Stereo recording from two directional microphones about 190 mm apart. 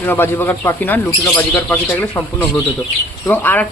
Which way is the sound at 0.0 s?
10° left (ahead or behind).